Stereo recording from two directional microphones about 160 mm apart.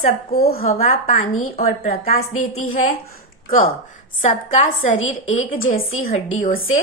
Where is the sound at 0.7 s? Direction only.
45° left (ahead or behind).